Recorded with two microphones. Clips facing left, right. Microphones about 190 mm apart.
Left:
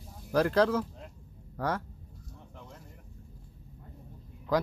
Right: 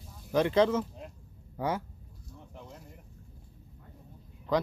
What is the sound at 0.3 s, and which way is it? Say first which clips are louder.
Speech: even; centre (ahead or behind).